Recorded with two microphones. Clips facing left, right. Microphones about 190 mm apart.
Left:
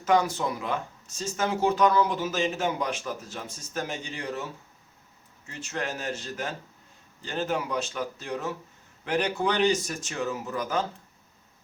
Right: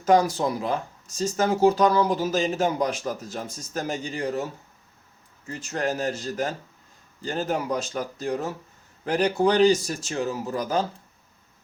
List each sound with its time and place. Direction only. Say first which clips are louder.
0.0 s speech: right 4 dB; 35° right (ahead or behind)